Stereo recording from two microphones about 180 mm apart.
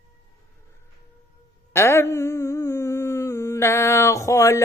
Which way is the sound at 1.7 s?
15° left (ahead or behind).